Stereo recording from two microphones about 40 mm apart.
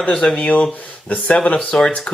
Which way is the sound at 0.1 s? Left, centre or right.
Centre.